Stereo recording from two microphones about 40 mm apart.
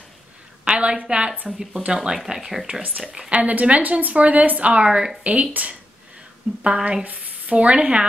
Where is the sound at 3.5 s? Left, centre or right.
Right.